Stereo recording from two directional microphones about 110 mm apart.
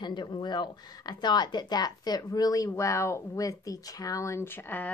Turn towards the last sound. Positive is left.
turn(degrees=20)  # may be behind; listen again after turning